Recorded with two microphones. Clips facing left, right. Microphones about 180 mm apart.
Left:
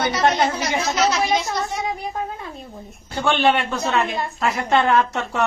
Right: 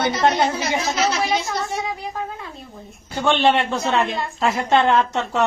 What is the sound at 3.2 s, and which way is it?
Speech, 20° right (ahead or behind).